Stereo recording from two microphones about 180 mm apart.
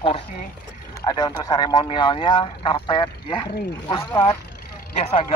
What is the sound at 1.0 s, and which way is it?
Speech, 20° left (ahead or behind).